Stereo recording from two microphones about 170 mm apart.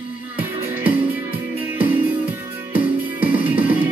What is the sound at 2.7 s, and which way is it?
Music, 10° right (ahead or behind).